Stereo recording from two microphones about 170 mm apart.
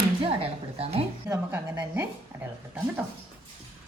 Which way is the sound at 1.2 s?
15° right (ahead or behind).